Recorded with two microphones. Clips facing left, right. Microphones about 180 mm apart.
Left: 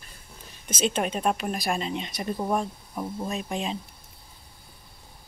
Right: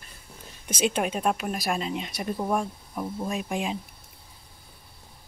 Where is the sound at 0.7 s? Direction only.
10° right (ahead or behind).